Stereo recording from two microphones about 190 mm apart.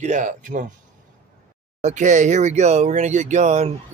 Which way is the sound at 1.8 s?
40° right (ahead or behind).